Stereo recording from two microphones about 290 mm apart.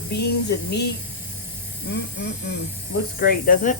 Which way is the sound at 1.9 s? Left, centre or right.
Left.